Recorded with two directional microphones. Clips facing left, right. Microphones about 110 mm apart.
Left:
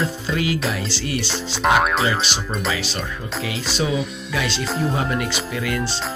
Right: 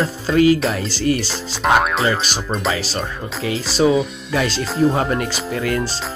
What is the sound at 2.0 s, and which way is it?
Speech, 40° right (ahead or behind).